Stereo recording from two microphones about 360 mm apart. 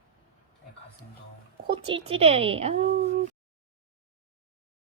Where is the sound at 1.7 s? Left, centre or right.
Centre.